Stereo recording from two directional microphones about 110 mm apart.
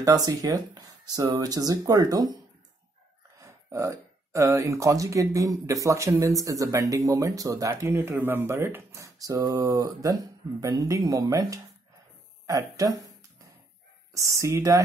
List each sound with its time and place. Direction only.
0.0 s speech: 30° right (ahead or behind)
3.3 s speech: 30° right (ahead or behind)
14.1 s speech: 30° right (ahead or behind)